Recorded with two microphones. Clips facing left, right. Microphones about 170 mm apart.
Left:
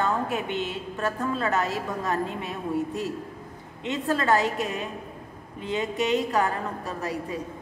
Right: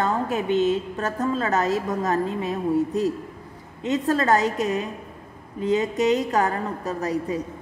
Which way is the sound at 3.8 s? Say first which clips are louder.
Right 4 dB; 40° right (ahead or behind).